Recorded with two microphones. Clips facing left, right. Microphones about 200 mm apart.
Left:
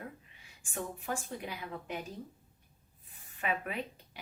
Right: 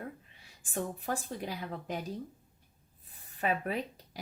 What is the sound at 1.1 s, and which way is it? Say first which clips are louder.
Speech: right 2 dB; 35° right (ahead or behind).